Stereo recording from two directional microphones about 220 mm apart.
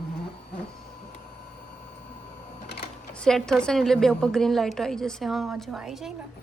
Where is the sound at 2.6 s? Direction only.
50° left (ahead or behind).